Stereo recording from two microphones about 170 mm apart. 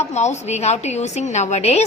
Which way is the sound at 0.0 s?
40° left (ahead or behind).